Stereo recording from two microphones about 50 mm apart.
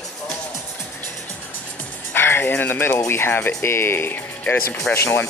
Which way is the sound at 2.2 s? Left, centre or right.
Left.